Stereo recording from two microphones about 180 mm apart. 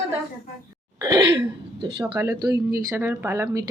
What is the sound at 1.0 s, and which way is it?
Throat clearing, 20° right (ahead or behind).